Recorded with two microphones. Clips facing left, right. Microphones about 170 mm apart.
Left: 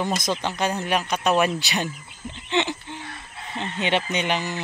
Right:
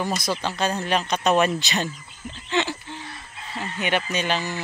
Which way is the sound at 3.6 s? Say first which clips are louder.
Left 1 dB; 25° left (ahead or behind).